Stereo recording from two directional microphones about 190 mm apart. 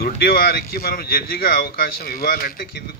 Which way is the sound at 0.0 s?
50° left (ahead or behind).